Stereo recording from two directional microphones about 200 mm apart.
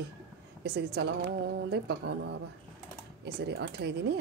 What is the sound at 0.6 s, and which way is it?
A woman's voice, 55° right (ahead or behind).